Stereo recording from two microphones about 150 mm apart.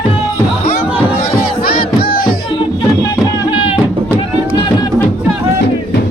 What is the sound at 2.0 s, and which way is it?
Music, 85° left.